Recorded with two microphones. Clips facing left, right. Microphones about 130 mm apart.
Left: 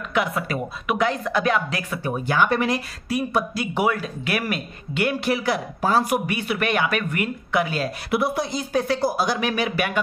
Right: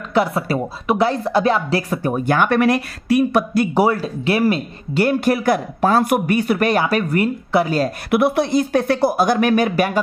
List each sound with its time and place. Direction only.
0.1 s speech: 35° right (ahead or behind); by 3.6 s 65° right (ahead or behind)
3.7 s speech: 35° right (ahead or behind)
8.1 s speech: 60° right (ahead or behind); by 9.9 s 45° right (ahead or behind)